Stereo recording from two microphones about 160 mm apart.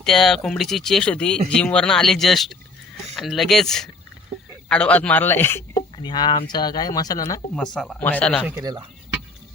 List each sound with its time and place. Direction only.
0.0 s speech: centre (ahead or behind)
6.0 s speech: 25° left (ahead or behind)
7.5 s speech: 5° left (ahead or behind)